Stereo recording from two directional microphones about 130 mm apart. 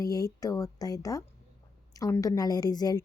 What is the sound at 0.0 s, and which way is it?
Speech, 25° left (ahead or behind).